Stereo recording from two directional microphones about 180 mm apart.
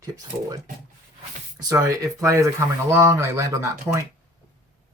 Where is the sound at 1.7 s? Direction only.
20° right (ahead or behind).